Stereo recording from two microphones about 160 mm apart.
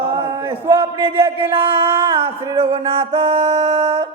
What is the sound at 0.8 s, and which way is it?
Music, 30° right (ahead or behind).